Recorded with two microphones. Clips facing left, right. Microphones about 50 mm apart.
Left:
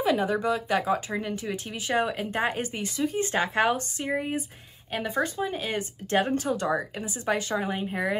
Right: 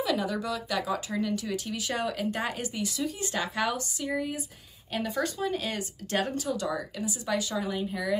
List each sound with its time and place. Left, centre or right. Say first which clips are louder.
0.0 s speech: left 4 dB; left